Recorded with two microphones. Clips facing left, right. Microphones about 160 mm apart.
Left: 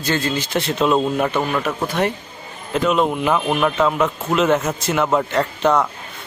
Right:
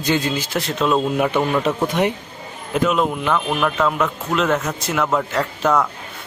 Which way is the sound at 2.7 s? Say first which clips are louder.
Left 1 dB; centre (ahead or behind).